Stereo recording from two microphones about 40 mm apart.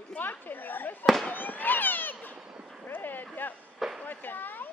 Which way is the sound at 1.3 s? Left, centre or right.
Left.